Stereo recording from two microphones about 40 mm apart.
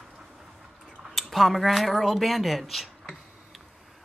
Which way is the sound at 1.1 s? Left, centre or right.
Centre.